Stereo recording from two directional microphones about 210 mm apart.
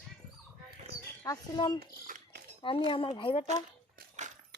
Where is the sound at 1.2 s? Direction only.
20° left (ahead or behind).